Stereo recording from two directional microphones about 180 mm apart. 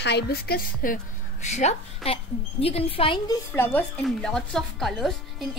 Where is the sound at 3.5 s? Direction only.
10° left (ahead or behind).